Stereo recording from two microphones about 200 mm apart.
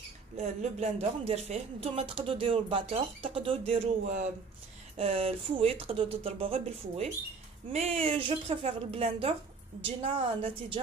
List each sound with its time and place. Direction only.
0.4 s speech: 35° right (ahead or behind)